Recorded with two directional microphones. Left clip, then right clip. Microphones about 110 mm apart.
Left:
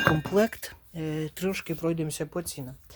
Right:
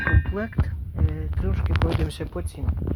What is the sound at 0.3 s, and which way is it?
Speech, 20° left (ahead or behind).